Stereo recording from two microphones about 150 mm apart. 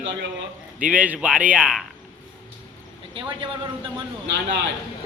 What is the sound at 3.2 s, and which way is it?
Speech, 35° right (ahead or behind).